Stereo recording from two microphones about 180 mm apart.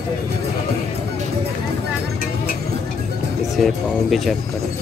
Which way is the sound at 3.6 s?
Centre (ahead or behind).